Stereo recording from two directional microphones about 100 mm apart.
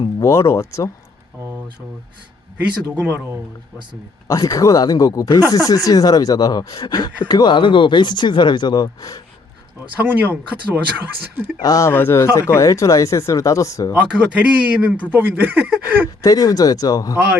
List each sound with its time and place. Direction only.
0.2 s speech: 30° left (ahead or behind)
2.6 s speech: 15° right (ahead or behind)
4.3 s speech: 35° left (ahead or behind)
9.9 s speech: 15° right (ahead or behind)
11.6 s speech: 35° left (ahead or behind)
11.9 s speech: 25° left (ahead or behind)
13.9 s speech: 15° right (ahead or behind)
16.2 s speech: 35° left (ahead or behind)